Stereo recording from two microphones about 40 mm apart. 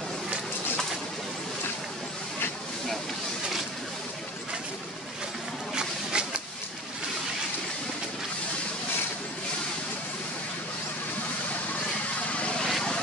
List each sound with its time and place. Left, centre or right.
5.8 s a sound: right
12.2 s vehicle: left
12.6 s vehicle: centre